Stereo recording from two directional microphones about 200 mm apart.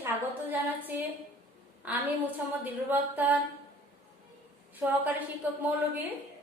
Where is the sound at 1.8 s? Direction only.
10° right (ahead or behind).